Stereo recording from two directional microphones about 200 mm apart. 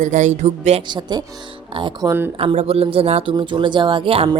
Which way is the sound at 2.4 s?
30° right (ahead or behind).